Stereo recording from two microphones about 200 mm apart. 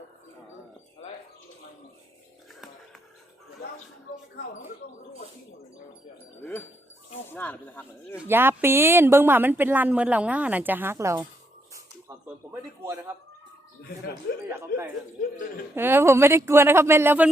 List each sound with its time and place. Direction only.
7.3 s speech: 10° left (ahead or behind)
8.1 s speech: 10° right (ahead or behind)
14.7 s a man's voice: 45° left (ahead or behind)
15.7 s speech: 10° right (ahead or behind)